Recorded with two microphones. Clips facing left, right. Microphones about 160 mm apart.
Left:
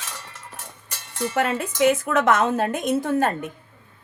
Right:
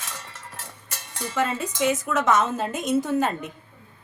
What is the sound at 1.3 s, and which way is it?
Speech, 60° left (ahead or behind).